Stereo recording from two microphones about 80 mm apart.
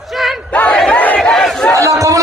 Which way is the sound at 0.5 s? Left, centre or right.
Centre.